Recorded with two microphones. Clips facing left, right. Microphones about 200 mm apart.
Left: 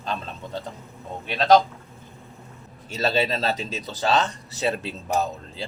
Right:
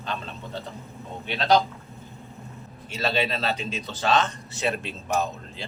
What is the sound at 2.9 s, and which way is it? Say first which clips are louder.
A man's voice: left 3 dB; 40° left (ahead or behind).